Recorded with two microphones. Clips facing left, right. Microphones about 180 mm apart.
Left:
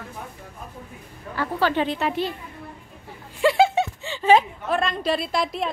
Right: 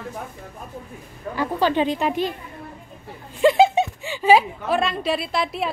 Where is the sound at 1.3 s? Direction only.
15° right (ahead or behind).